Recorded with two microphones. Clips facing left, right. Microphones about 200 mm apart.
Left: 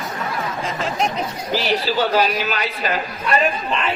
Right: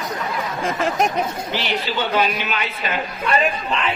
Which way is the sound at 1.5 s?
40° left (ahead or behind).